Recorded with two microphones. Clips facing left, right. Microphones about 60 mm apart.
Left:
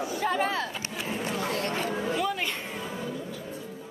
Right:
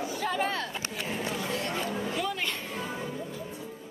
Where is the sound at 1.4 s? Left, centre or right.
Left.